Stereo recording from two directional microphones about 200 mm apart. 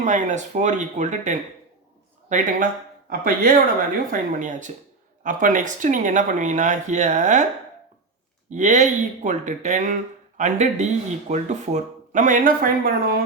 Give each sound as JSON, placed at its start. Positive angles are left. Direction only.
{"t": 0.0, "sound": "speech", "side_deg": -35}
{"t": 3.1, "sound": "speech", "side_deg": -45}
{"t": 8.4, "sound": "speech", "side_deg": -35}